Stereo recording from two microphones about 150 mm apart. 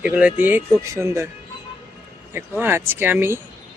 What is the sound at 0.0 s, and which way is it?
Speech, 5° right (ahead or behind).